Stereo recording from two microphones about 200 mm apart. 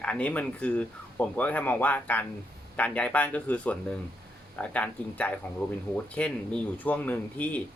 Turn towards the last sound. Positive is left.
turn(degrees=10)  # may be behind; listen again after turning